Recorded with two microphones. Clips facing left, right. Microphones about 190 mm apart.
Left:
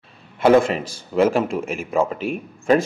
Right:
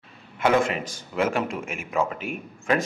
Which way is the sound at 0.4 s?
35° left (ahead or behind).